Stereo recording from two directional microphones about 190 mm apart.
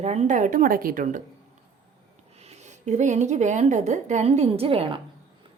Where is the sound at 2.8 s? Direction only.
40° right (ahead or behind).